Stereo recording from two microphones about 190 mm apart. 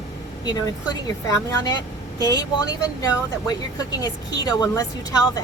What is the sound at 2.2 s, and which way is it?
A woman's voice, 20° left (ahead or behind).